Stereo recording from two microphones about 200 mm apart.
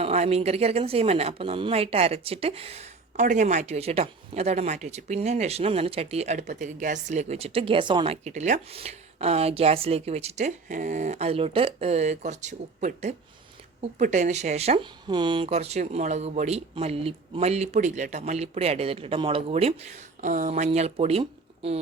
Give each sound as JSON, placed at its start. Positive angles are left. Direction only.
{"t": 0.0, "sound": "a woman's voice", "side_deg": -30}